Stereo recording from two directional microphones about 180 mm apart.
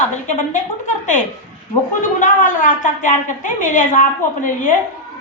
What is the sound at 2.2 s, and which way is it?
A woman's voice, 45° left (ahead or behind).